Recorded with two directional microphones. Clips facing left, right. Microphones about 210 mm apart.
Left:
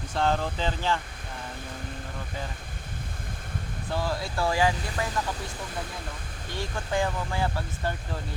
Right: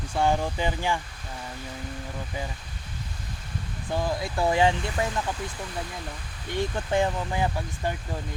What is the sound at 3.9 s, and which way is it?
Speech, 15° right (ahead or behind).